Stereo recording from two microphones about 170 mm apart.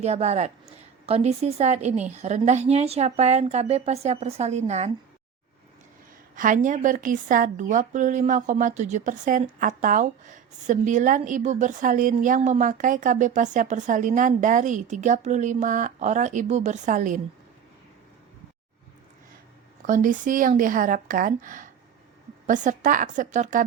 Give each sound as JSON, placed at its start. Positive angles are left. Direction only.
{"t": 0.0, "sound": "a woman's voice", "side_deg": -40}
{"t": 6.3, "sound": "a woman's voice", "side_deg": -50}
{"t": 19.9, "sound": "a woman's voice", "side_deg": -50}